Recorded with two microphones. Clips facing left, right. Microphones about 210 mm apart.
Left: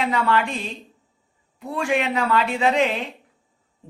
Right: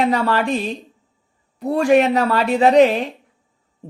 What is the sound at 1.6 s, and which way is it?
Speech, 40° right (ahead or behind).